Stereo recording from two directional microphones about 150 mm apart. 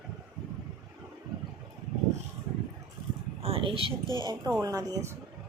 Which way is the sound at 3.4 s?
40° right (ahead or behind).